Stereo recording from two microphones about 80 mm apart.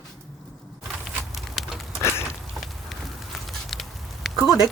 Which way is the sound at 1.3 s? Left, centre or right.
Centre.